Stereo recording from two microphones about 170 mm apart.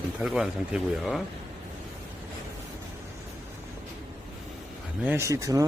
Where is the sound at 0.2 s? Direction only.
5° right (ahead or behind).